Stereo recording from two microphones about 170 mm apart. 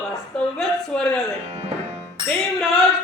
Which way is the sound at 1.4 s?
40° right (ahead or behind).